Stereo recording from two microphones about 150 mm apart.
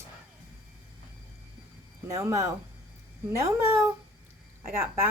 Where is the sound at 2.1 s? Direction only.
20° right (ahead or behind).